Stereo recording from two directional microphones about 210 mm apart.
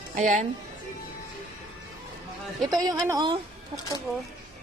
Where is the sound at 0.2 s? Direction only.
35° right (ahead or behind).